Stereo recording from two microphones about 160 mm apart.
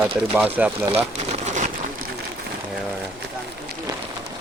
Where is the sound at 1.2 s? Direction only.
45° right (ahead or behind).